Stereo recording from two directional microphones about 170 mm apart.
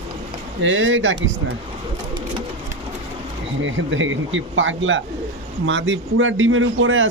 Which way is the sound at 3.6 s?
90° right.